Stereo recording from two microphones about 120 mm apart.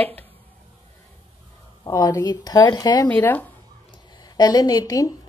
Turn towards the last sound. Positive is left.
turn(degrees=30)  # may be behind; listen again after turning